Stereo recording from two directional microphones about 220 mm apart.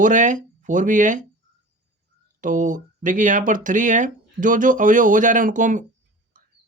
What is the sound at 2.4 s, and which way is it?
Speech, 35° right (ahead or behind).